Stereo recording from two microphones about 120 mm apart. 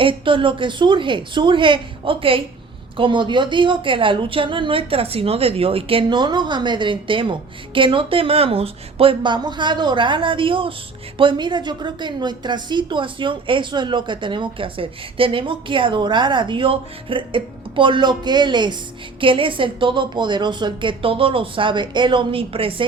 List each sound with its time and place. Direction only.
0.0 s a woman's voice: 45° right (ahead or behind)